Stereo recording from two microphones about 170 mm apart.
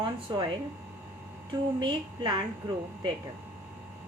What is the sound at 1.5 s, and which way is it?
Speech, 25° right (ahead or behind).